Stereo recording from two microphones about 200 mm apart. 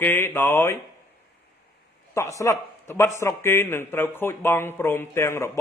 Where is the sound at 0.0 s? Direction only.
10° left (ahead or behind).